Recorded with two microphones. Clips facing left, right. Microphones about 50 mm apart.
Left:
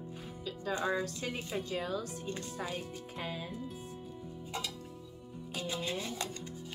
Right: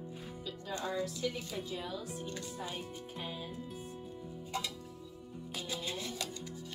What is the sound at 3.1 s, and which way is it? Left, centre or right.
Music, left.